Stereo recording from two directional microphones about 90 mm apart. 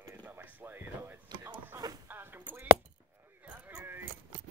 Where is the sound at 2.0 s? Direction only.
20° right (ahead or behind).